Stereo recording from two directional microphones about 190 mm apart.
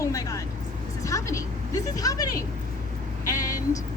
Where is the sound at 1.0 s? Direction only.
15° left (ahead or behind).